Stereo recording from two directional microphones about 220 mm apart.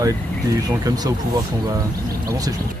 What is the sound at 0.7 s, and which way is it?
Speech, 15° right (ahead or behind).